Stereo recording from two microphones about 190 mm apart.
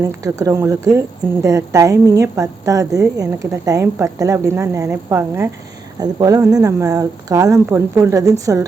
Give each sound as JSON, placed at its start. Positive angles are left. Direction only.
{"t": 0.0, "sound": "speech", "side_deg": -15}